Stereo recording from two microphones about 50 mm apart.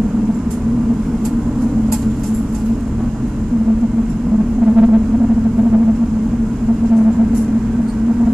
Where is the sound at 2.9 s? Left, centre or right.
Centre.